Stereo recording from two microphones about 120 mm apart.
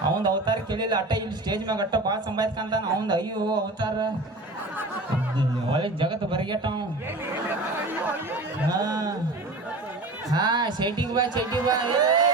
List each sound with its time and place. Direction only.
0.2 s speech: 40° right (ahead or behind)
5.7 s speech: 45° right (ahead or behind)
8.7 s speech: 30° right (ahead or behind)
10.3 s speech: 35° right (ahead or behind)